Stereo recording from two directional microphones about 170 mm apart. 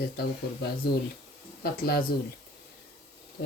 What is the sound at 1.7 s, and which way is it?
Speech, 60° left (ahead or behind).